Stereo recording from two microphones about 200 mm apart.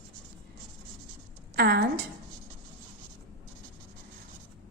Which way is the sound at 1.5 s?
50° right (ahead or behind).